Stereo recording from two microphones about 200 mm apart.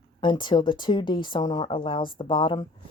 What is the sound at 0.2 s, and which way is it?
A woman's voice, 25° left (ahead or behind).